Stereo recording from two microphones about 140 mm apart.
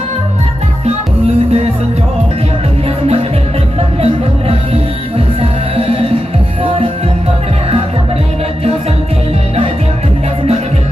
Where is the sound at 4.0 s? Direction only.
45° right (ahead or behind).